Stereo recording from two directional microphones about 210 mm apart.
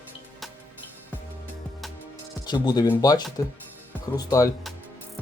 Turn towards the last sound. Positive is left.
turn(degrees=15)  # may be behind; listen again after turning